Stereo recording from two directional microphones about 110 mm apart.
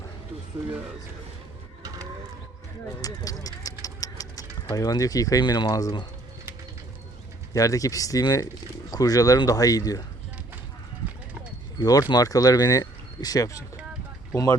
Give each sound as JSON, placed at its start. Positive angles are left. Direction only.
{"t": 3.0, "sound": "a sound", "side_deg": 35}
{"t": 4.7, "sound": "speech", "side_deg": 35}
{"t": 7.5, "sound": "speech", "side_deg": 30}
{"t": 11.8, "sound": "speech", "side_deg": 35}